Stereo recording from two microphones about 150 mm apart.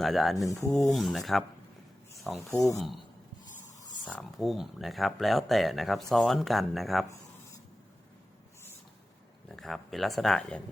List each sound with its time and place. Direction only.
0.0 s speech: centre (ahead or behind)
0.4 s speech: 15° left (ahead or behind)
0.9 s speech: centre (ahead or behind)
2.1 s a sound: centre (ahead or behind)
4.0 s speech: 5° left (ahead or behind)
9.5 s speech: centre (ahead or behind)